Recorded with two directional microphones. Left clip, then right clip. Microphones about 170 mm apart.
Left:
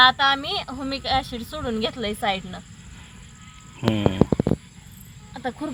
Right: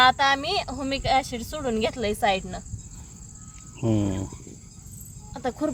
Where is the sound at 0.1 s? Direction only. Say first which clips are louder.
Left 1 dB; 10° right (ahead or behind).